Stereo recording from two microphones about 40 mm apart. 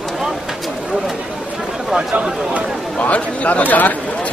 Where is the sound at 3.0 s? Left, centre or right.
Left.